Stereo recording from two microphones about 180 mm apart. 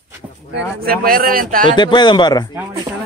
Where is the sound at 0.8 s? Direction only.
55° right (ahead or behind).